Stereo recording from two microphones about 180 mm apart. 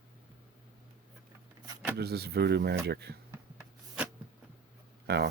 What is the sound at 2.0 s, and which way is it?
Speech, 60° right (ahead or behind).